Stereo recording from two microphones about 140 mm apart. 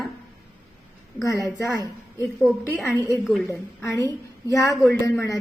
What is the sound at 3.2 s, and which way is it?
Speech, centre (ahead or behind).